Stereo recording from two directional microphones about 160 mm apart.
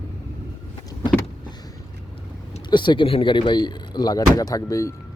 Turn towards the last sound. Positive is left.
turn(degrees=20)  # may be behind; listen again after turning